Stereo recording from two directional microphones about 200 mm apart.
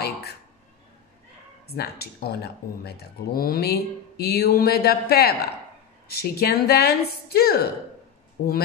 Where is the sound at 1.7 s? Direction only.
50° left (ahead or behind).